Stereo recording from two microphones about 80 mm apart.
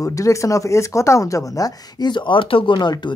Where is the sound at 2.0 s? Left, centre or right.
Left.